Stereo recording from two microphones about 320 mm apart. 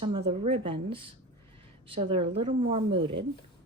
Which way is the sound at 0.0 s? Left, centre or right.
Centre.